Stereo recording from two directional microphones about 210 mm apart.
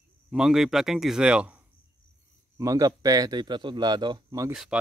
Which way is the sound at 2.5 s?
15° right (ahead or behind).